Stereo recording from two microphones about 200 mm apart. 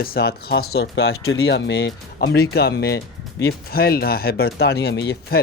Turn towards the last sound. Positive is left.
turn(degrees=60)  # may be behind; listen again after turning